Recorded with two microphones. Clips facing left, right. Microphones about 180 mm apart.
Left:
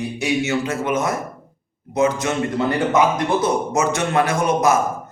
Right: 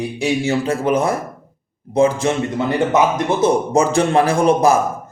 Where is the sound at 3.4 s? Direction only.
30° right (ahead or behind).